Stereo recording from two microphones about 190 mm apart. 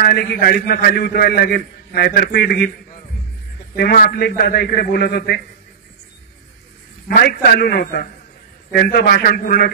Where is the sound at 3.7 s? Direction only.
55° left (ahead or behind).